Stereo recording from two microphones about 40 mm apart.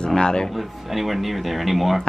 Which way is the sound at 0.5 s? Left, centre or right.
Centre.